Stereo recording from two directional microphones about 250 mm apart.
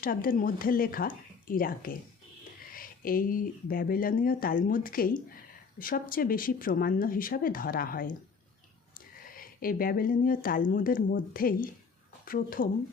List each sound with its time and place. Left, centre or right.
0.0 s speech: left
9.3 s speech: left